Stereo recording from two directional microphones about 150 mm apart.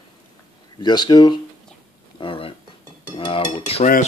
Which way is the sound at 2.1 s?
35° left (ahead or behind).